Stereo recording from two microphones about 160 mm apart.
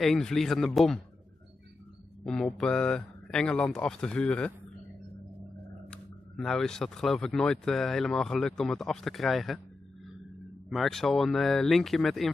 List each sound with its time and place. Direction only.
0.0 s speech: centre (ahead or behind)
2.2 s speech: 5° left (ahead or behind)
5.9 s speech: centre (ahead or behind)
10.7 s speech: centre (ahead or behind)